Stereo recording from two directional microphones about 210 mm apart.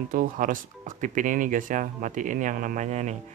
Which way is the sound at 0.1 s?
40° right (ahead or behind).